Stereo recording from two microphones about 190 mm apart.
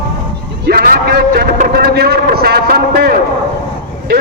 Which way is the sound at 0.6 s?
50° right (ahead or behind).